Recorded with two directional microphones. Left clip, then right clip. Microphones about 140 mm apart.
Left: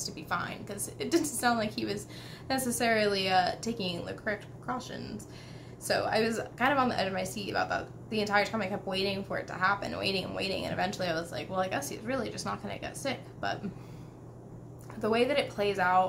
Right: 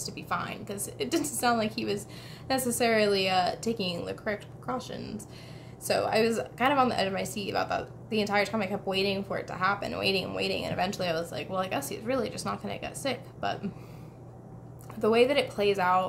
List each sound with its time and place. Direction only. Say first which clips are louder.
0.0 s a woman's voice: right 1 dB; 25° right (ahead or behind)
15.0 s a woman's voice: right 4 dB; 30° right (ahead or behind)